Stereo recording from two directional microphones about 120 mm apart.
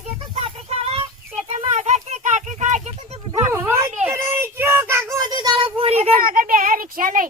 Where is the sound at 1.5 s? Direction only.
70° right (ahead or behind).